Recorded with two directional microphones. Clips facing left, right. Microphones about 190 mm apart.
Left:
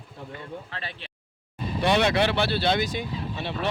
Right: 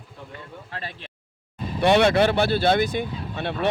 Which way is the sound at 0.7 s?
45° right (ahead or behind).